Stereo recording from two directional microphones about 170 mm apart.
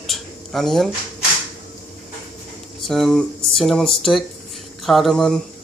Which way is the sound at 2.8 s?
Centre (ahead or behind).